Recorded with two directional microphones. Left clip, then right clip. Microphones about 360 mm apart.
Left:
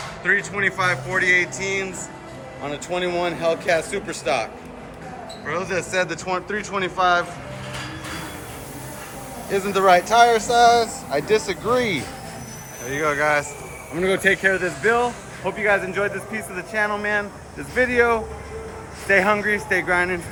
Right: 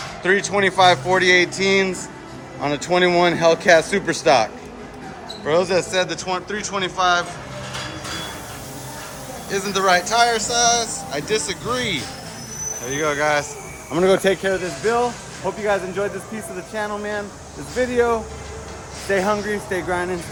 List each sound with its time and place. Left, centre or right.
0.2 s speech: centre
5.5 s speech: centre
9.5 s speech: centre
14.0 s speech: centre